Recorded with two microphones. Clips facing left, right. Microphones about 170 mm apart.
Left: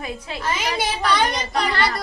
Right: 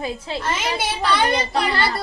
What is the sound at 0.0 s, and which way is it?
Speech, 30° right (ahead or behind).